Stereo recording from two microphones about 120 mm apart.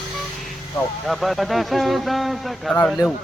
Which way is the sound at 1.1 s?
Centre (ahead or behind).